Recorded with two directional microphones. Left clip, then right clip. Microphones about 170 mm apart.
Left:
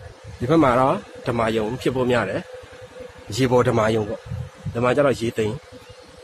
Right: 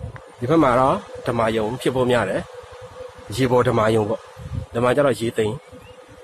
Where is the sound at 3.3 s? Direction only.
15° left (ahead or behind).